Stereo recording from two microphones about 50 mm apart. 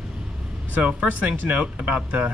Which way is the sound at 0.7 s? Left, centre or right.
Right.